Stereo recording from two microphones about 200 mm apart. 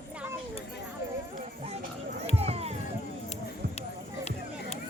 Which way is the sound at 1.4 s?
30° right (ahead or behind).